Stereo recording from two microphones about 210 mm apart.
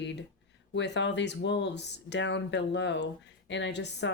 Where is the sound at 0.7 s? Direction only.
55° left (ahead or behind).